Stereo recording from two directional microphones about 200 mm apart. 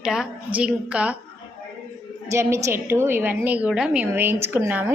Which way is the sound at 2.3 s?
15° right (ahead or behind).